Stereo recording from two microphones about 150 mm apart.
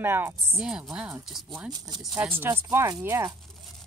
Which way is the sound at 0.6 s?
5° right (ahead or behind).